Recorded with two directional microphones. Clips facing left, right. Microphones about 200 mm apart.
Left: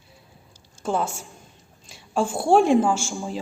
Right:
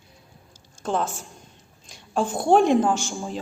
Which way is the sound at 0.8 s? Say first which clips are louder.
Left 1 dB; 10° left (ahead or behind).